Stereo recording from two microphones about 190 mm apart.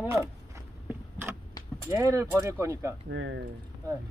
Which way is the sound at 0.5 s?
15° right (ahead or behind).